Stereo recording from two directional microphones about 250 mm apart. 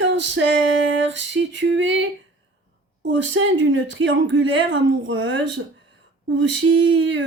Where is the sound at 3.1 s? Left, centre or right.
Right.